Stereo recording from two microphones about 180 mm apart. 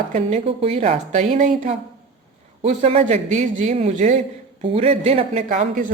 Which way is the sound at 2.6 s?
35° right (ahead or behind).